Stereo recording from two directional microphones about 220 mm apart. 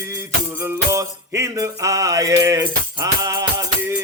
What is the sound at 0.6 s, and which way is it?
Music, 15° right (ahead or behind).